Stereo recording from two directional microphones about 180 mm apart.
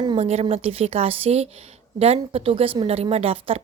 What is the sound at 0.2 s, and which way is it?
Speech, 35° right (ahead or behind).